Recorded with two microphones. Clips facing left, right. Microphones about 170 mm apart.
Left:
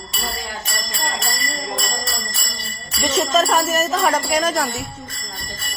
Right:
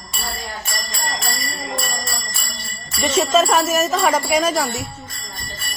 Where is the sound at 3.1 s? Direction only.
Centre (ahead or behind).